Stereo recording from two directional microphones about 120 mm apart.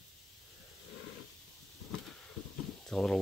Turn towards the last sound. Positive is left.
turn(degrees=5)  # may be behind; listen again after turning